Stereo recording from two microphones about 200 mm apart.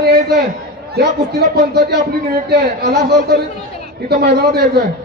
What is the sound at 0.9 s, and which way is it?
A man's voice, 55° right (ahead or behind).